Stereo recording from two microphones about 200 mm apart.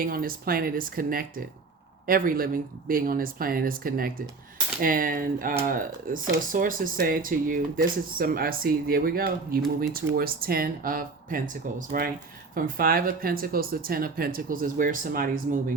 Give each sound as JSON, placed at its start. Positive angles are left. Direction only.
{"t": 0.0, "sound": "speech", "side_deg": -45}